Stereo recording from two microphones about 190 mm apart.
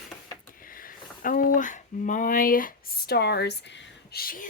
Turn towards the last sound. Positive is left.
turn(degrees=50)  # may be behind; listen again after turning